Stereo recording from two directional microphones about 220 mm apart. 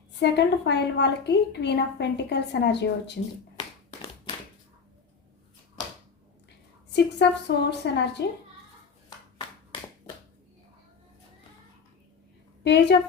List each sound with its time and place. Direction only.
0.2 s a woman's voice: 50° left (ahead or behind)
6.9 s a woman's voice: 50° left (ahead or behind)
12.6 s a woman's voice: 50° left (ahead or behind)